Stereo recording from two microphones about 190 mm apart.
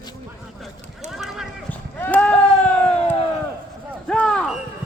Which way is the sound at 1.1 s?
Centre (ahead or behind).